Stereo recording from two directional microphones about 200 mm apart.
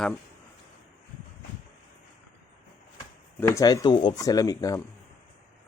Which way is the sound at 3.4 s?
15° left (ahead or behind).